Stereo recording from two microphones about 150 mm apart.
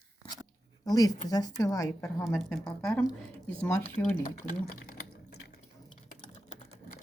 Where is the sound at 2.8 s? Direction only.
10° left (ahead or behind).